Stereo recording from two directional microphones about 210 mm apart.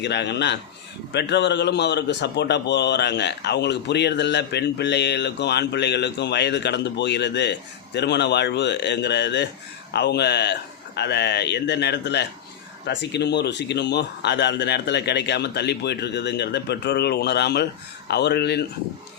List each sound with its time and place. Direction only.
0.0 s a man's voice: 55° left (ahead or behind)